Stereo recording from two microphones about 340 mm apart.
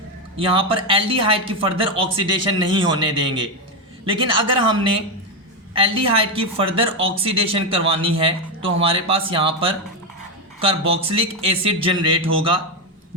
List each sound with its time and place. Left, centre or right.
0.3 s speech: centre